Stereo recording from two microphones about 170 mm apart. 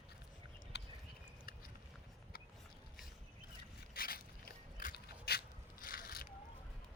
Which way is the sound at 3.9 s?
60° left (ahead or behind).